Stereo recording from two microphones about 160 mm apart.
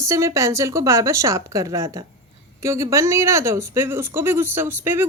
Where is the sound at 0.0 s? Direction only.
20° right (ahead or behind).